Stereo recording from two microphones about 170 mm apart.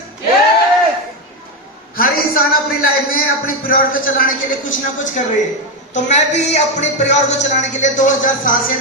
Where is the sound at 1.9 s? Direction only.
60° left (ahead or behind).